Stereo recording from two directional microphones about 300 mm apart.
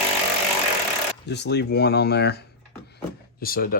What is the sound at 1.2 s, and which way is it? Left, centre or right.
Speech, left.